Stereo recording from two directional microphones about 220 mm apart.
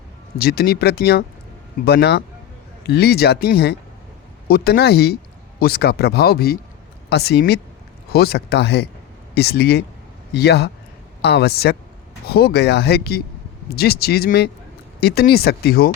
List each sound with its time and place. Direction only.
0.3 s speech: 45° left (ahead or behind)